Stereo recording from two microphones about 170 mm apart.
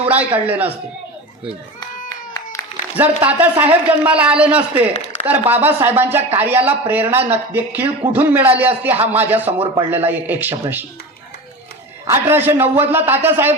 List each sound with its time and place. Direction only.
0.0 s a man's voice: 10° right (ahead or behind)
2.0 s clapping: 20° left (ahead or behind)
3.0 s speech: 10° right (ahead or behind)
4.9 s a sound: 40° left (ahead or behind)
5.2 s speech: 10° right (ahead or behind)
12.0 s speech: 15° right (ahead or behind)